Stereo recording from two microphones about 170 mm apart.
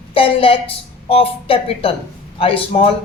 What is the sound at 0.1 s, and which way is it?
A woman's voice, 30° left (ahead or behind).